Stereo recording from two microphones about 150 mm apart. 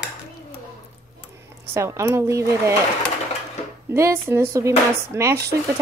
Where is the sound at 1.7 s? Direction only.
20° right (ahead or behind).